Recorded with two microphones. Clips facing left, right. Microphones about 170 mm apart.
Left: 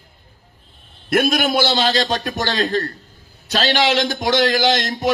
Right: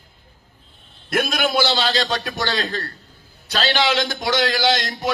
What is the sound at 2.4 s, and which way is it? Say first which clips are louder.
Speech: left 4 dB; 50° left (ahead or behind).